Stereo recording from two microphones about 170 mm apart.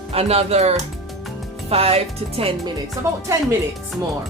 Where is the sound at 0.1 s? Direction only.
35° right (ahead or behind).